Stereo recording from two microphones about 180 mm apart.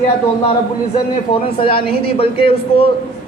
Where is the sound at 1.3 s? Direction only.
30° left (ahead or behind).